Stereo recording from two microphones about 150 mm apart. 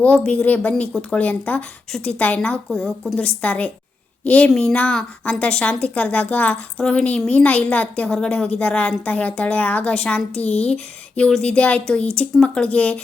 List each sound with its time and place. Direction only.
0.0 s a woman's voice: 10° left (ahead or behind)
10.3 s a child's voice: 45° left (ahead or behind)
11.2 s a woman's voice: 5° left (ahead or behind)